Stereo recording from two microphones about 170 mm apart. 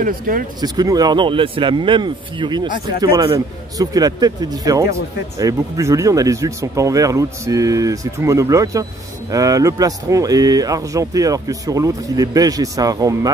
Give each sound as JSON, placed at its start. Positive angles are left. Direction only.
{"t": 0.0, "sound": "speech", "side_deg": -55}
{"t": 0.6, "sound": "speech", "side_deg": -25}